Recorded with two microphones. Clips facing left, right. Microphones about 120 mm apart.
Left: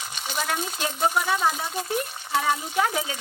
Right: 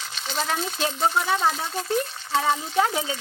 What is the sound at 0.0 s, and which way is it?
Speech, 10° left (ahead or behind).